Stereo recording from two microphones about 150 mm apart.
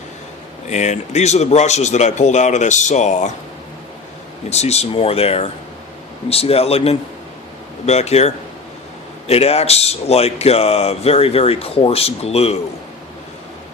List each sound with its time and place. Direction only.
0.7 s speech: 50° left (ahead or behind)
4.4 s speech: 45° left (ahead or behind)